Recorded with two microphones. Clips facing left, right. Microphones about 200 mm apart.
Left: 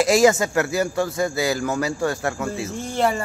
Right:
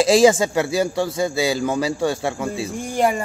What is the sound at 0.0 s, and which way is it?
Speech, 30° right (ahead or behind).